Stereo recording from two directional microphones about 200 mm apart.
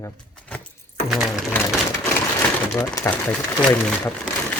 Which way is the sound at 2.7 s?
10° left (ahead or behind).